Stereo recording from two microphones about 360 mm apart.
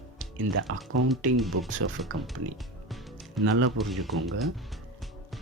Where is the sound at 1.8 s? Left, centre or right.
Right.